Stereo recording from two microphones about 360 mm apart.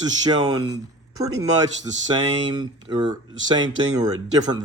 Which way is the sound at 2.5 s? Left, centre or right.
Centre.